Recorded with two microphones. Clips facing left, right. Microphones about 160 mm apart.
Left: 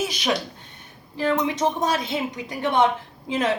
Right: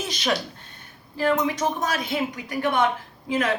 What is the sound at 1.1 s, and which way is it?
A woman's voice, 20° left (ahead or behind).